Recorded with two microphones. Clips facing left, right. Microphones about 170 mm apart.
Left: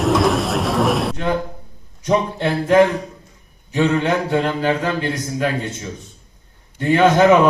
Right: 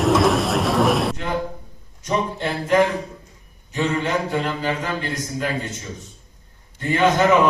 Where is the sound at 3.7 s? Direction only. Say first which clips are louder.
Left 5 dB; 65° left (ahead or behind).